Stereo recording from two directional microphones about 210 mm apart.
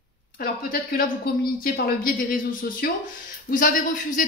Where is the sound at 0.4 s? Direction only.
45° left (ahead or behind).